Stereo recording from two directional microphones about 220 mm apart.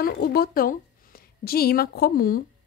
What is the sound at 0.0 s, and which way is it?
A woman's voice, 45° left (ahead or behind).